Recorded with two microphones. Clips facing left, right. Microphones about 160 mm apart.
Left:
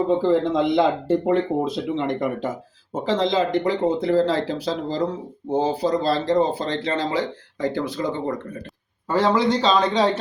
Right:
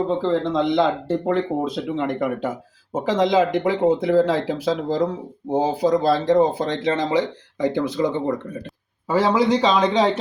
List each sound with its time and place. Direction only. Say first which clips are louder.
0.1 s speech: left 2 dB; 10° left (ahead or behind); by 8.2 s 20° right (ahead or behind)
9.0 s speech: right 1 dB; 10° right (ahead or behind)